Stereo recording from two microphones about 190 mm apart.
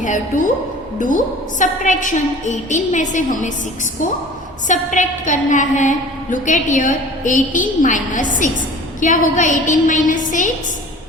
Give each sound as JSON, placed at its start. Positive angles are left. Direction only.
{"t": 0.0, "sound": "a woman's voice", "side_deg": 45}
{"t": 4.7, "sound": "a woman's voice", "side_deg": 40}